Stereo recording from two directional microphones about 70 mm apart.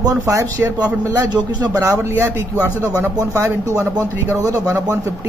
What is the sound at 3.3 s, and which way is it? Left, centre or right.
Speech, right.